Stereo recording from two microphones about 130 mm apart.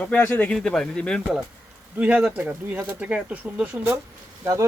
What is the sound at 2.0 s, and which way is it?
Speech, 10° right (ahead or behind).